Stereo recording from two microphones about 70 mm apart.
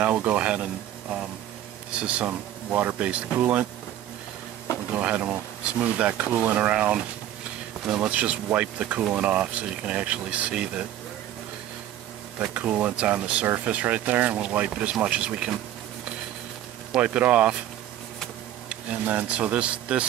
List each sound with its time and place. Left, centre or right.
0.0 s speech: centre
1.9 s speech: centre
4.9 s speech: right
12.5 s speech: centre
17.0 s speech: centre
18.7 s speech: right